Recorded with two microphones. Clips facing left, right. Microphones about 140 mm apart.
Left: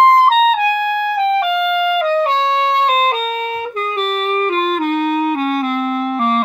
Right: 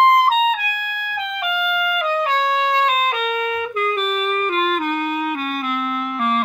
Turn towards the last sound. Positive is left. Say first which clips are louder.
# left 5 dB
turn(degrees=30)  # may be behind; listen again after turning